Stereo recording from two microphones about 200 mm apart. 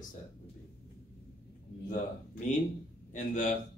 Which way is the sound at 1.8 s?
40° left (ahead or behind).